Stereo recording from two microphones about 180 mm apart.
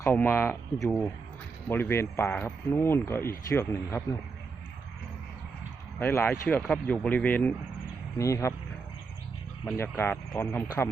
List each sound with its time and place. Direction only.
0.0 s speech: 10° left (ahead or behind)
6.0 s speech: 10° left (ahead or behind)
9.7 s speech: 10° left (ahead or behind)